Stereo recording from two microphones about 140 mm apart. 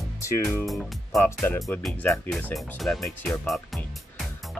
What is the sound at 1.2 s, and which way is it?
Speech, 15° left (ahead or behind).